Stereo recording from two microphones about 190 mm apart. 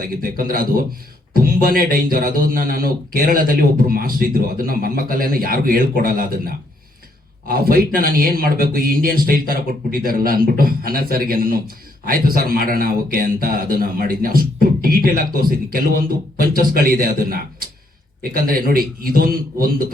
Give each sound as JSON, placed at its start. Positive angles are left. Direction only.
{"t": 0.1, "sound": "speech", "side_deg": -50}